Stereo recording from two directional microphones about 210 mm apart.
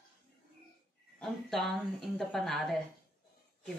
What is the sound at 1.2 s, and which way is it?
Speech, centre (ahead or behind).